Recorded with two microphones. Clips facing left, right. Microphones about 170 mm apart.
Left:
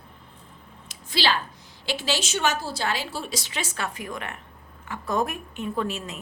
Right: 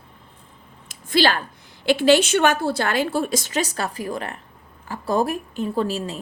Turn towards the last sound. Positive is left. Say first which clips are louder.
# right 5 dB
turn(degrees=-35)  # may be behind; listen again after turning